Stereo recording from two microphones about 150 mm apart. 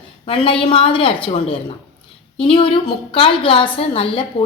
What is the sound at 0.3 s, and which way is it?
A woman's voice, 35° left (ahead or behind).